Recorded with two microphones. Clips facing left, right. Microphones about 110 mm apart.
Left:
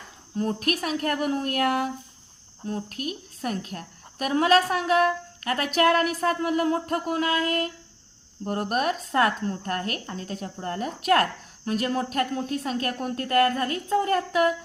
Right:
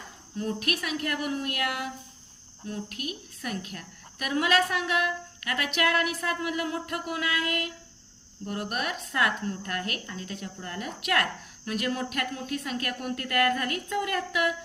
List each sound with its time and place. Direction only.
0.3 s speech: 40° left (ahead or behind)